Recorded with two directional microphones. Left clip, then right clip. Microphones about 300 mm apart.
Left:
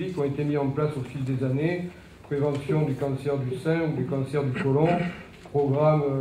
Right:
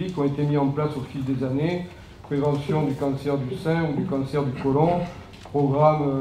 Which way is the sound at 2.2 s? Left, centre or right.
Right.